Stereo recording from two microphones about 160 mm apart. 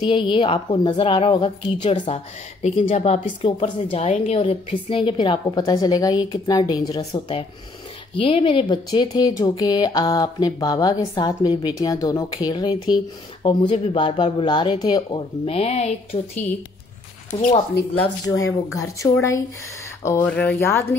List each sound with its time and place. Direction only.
0.0 s a woman's voice: 30° left (ahead or behind)
15.4 s a woman's voice: 40° left (ahead or behind)
18.2 s speech: 20° left (ahead or behind)